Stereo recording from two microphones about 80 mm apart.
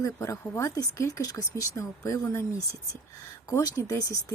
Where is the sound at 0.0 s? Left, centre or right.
Left.